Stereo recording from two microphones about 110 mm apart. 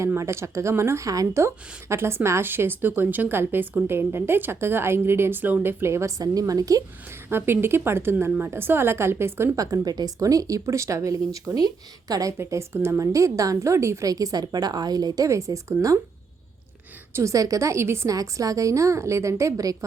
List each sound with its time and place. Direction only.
0.0 s a woman's voice: 25° right (ahead or behind)
7.3 s a woman's voice: 20° right (ahead or behind)
17.2 s a woman's voice: 30° right (ahead or behind)